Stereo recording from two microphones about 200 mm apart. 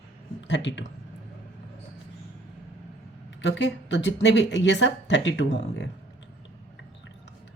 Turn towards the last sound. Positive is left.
turn(degrees=65)  # may be behind; listen again after turning